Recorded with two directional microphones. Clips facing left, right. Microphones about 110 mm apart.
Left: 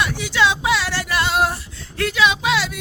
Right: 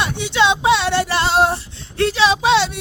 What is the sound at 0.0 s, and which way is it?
Female singing, 25° right (ahead or behind).